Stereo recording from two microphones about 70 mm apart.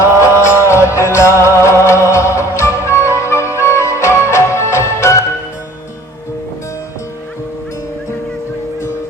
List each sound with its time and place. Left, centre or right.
0.0 s music: left